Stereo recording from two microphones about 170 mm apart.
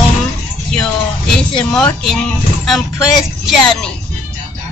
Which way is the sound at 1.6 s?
5° left (ahead or behind).